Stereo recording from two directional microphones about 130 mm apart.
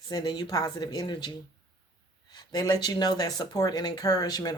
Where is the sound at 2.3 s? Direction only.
35° left (ahead or behind).